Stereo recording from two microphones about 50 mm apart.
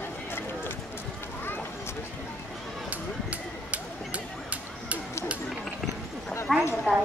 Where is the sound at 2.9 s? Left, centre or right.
Right.